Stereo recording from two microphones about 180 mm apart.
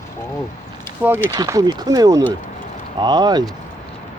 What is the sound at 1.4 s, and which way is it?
Speech, 20° right (ahead or behind).